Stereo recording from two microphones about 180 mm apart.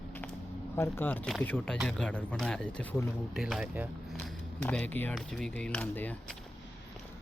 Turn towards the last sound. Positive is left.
turn(degrees=10)  # may be behind; listen again after turning